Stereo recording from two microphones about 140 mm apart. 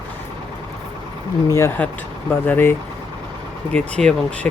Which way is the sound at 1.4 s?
20° left (ahead or behind).